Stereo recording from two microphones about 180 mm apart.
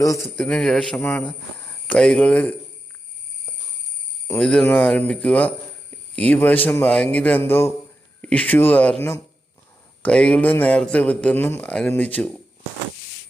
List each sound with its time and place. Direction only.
0.0 s a man's voice: 20° left (ahead or behind)
0.3 s a man's voice: 5° left (ahead or behind)
4.3 s a man's voice: 5° left (ahead or behind)